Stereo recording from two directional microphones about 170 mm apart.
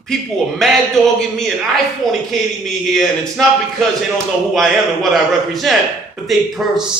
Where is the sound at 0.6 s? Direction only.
Centre (ahead or behind).